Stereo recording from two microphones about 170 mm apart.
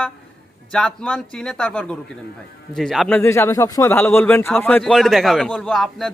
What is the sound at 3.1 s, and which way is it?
Speech, 15° left (ahead or behind).